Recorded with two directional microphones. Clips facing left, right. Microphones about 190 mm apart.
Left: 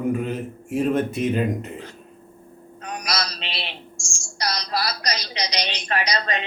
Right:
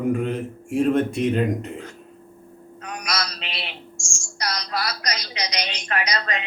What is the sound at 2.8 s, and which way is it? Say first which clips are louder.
A woman's voice: left 1 dB; 30° left (ahead or behind).